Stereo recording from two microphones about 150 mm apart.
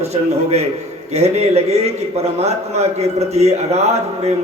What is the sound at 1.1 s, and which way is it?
A man's voice, 45° right (ahead or behind).